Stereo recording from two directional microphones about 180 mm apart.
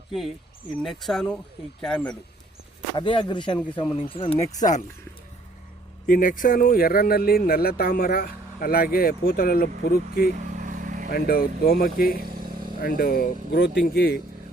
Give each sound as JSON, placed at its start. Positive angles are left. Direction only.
{"t": 0.8, "sound": "speech", "side_deg": 0}
{"t": 2.9, "sound": "speech", "side_deg": 30}
{"t": 4.5, "sound": "speech", "side_deg": 45}
{"t": 6.1, "sound": "speech", "side_deg": 50}
{"t": 10.3, "sound": "vehicle", "side_deg": -45}
{"t": 11.1, "sound": "speech", "side_deg": 55}
{"t": 12.2, "sound": "vehicle", "side_deg": -55}
{"t": 12.8, "sound": "speech", "side_deg": 50}